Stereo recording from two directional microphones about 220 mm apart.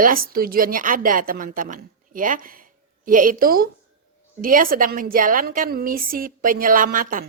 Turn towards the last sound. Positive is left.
turn(degrees=-40)  # may be behind; listen again after turning